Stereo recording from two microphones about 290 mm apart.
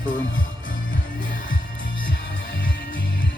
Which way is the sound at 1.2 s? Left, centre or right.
Left.